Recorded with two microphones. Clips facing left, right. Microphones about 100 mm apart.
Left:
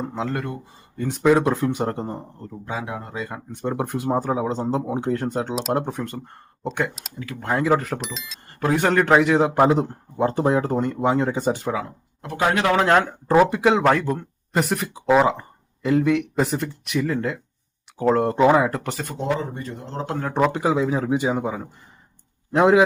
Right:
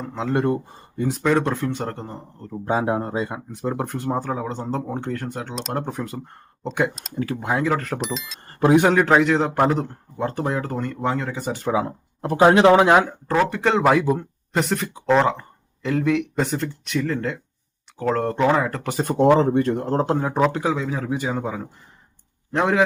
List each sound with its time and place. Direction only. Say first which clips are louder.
0.3 s speech: right 8 dB; 35° right (ahead or behind)
0.9 s speech: right 3 dB; 5° right (ahead or behind)
1.2 s speech: left 4 dB; 10° left (ahead or behind)
2.6 s speech: right 9 dB; 40° right (ahead or behind)
3.5 s speech: left 4 dB; centre (ahead or behind); by 5.5 s 20° left (ahead or behind)
5.5 s speech: left 3 dB; 5° left (ahead or behind)
8.5 s a man's voice: right 5 dB; 20° right (ahead or behind)
8.9 s speech: even; centre (ahead or behind); by 11.6 s 20° left (ahead or behind)
11.9 s speech: right 8 dB; 35° right (ahead or behind); by 13.0 s 15° right (ahead or behind)
13.2 s speech: left 4 dB; 15° left (ahead or behind)
19.1 s speech: right 11 dB; 60° right (ahead or behind)
20.3 s speech: left 4 dB; centre (ahead or behind)
20.7 s speech: left 4 dB; 20° left (ahead or behind)